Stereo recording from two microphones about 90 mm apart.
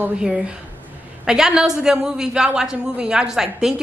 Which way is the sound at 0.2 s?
10° right (ahead or behind).